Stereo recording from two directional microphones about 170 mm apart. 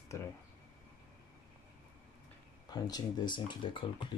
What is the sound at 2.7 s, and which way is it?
Speech, 25° left (ahead or behind).